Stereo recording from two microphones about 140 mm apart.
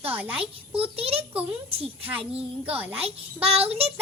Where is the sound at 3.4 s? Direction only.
45° right (ahead or behind).